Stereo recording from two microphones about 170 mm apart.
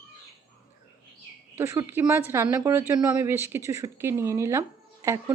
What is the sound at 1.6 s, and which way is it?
Speech, 15° right (ahead or behind).